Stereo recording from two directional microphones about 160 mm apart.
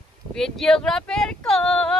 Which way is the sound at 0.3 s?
5° left (ahead or behind).